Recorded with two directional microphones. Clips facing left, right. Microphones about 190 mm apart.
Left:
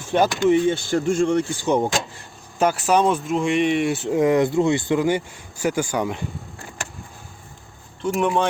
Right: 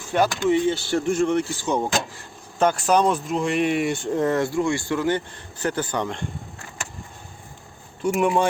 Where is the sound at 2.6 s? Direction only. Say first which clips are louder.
Left 1 dB; 5° left (ahead or behind).